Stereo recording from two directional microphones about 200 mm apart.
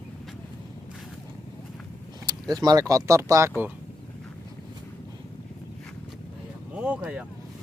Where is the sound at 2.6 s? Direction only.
20° right (ahead or behind).